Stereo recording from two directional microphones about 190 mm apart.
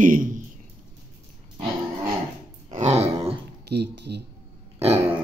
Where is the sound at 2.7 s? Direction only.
35° right (ahead or behind).